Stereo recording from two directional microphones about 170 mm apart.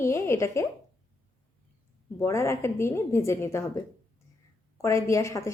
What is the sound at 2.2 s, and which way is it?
Speech, 15° left (ahead or behind).